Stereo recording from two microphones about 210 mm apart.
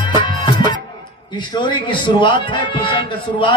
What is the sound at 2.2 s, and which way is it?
Music, 20° left (ahead or behind).